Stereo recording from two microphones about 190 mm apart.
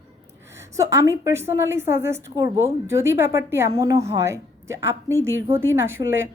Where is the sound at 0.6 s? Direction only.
15° right (ahead or behind).